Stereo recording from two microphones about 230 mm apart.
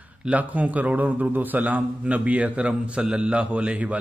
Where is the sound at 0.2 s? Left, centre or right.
Centre.